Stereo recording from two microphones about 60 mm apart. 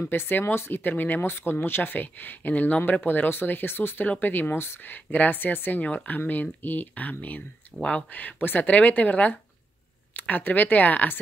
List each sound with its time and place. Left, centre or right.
0.0 s speech: left